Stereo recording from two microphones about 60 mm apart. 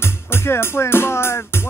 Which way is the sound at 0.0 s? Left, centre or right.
Left.